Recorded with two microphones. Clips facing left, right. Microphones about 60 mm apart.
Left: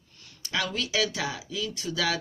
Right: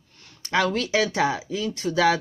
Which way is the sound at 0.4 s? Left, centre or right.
Right.